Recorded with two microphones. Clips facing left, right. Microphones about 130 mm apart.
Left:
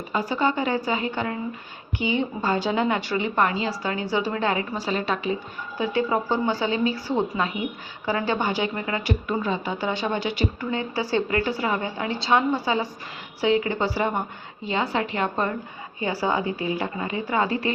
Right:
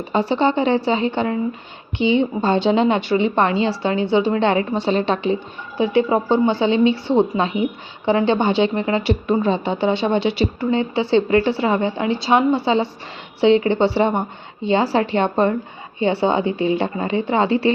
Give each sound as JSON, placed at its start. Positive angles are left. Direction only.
{"t": 0.1, "sound": "speech", "side_deg": -30}